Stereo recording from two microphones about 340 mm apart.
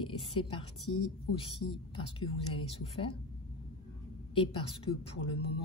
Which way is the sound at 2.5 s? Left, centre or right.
Centre.